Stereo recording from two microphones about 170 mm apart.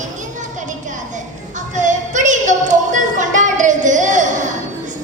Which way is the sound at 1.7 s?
45° right (ahead or behind).